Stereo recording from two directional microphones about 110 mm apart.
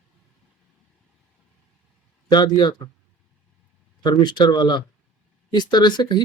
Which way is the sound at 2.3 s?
40° left (ahead or behind).